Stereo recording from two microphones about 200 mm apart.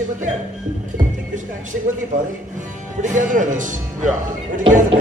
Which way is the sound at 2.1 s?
40° right (ahead or behind).